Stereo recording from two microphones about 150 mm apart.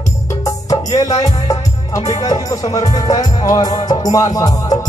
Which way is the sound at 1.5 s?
25° left (ahead or behind).